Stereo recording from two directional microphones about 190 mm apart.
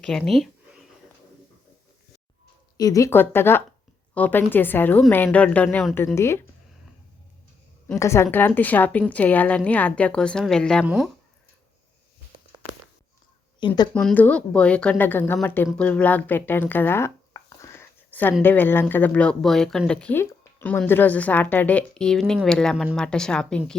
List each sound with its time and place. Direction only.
0.0 s a sound: 5° left (ahead or behind)
2.7 s a woman's voice: 20° left (ahead or behind)
7.9 s a woman's voice: 15° left (ahead or behind); by 11.1 s 5° right (ahead or behind)
13.6 s speech: 25° left (ahead or behind)
13.9 s speech: 5° left (ahead or behind)